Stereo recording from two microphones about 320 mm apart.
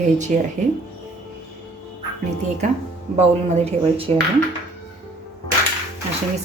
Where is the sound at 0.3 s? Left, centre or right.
Right.